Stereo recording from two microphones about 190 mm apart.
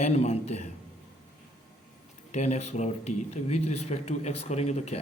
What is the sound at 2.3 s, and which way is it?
Speech, 35° left (ahead or behind).